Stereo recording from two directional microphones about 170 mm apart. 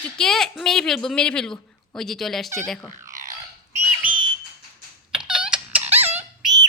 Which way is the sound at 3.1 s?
50° right (ahead or behind).